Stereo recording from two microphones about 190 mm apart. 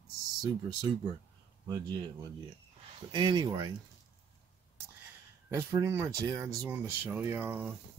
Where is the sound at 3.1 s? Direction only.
25° right (ahead or behind).